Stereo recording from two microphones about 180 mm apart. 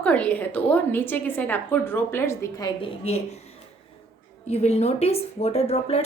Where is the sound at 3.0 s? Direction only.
35° left (ahead or behind).